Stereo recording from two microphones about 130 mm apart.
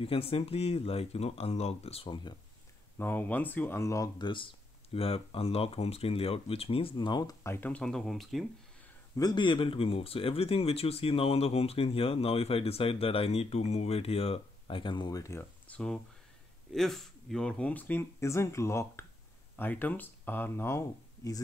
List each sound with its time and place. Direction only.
0.0 s speech: 50° left (ahead or behind)
3.0 s speech: 15° left (ahead or behind)
4.9 s speech: 45° left (ahead or behind)
7.4 s speech: 15° left (ahead or behind); by 8.5 s centre (ahead or behind)
9.1 s speech: 30° left (ahead or behind)
15.6 s speech: 10° left (ahead or behind)